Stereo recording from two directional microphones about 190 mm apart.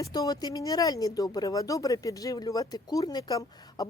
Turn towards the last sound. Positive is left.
turn(degrees=20)  # may be behind; listen again after turning